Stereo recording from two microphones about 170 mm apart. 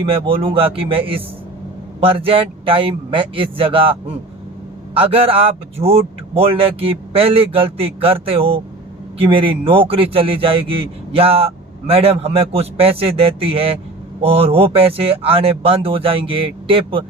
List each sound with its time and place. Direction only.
0.0 s a man's voice: 35° right (ahead or behind)
4.9 s a man's voice: 35° right (ahead or behind)